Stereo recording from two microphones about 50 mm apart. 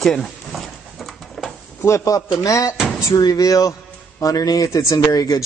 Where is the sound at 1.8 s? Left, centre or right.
Left.